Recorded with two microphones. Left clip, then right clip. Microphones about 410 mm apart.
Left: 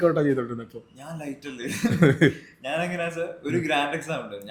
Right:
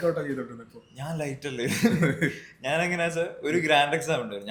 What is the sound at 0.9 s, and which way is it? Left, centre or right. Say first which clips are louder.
Speech: right 5 dB; right.